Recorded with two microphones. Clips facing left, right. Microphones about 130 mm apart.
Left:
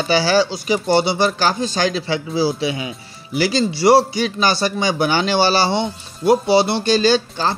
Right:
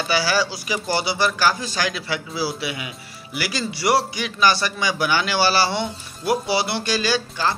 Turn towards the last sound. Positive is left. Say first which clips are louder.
# left 5 dB
turn(degrees=30)  # may be behind; listen again after turning